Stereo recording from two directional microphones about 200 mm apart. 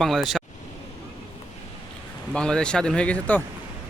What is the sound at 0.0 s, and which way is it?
Speech, centre (ahead or behind).